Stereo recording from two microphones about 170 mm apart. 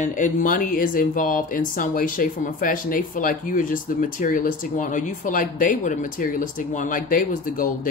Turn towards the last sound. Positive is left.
turn(degrees=55)  # may be behind; listen again after turning